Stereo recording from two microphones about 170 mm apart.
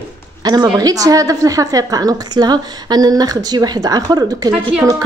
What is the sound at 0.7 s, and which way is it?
A woman's voice, 20° right (ahead or behind).